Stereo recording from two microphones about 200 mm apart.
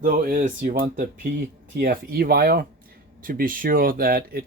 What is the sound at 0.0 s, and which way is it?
Speech, 45° right (ahead or behind).